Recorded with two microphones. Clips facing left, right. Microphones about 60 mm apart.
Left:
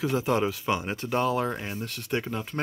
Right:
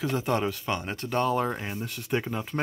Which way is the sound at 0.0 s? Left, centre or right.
Centre.